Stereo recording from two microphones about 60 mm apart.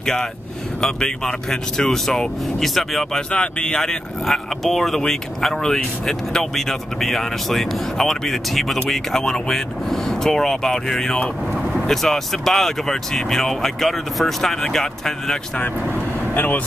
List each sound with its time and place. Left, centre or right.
0.0 s speech: centre
3.2 s speech: centre
16.3 s speech: left